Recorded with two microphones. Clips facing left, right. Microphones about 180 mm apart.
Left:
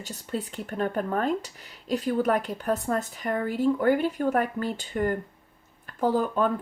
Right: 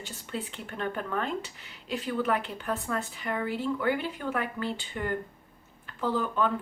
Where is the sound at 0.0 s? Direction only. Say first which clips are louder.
Left 4 dB; 40° left (ahead or behind).